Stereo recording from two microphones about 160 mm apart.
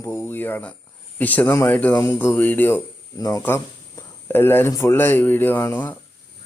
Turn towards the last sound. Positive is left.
turn(degrees=15)  # may be behind; listen again after turning